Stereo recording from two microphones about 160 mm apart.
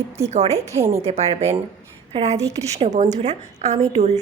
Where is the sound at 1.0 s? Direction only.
40° right (ahead or behind).